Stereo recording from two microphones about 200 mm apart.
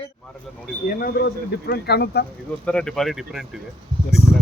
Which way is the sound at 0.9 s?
45° left (ahead or behind).